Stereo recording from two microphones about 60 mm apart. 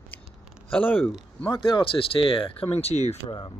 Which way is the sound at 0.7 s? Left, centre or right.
Left.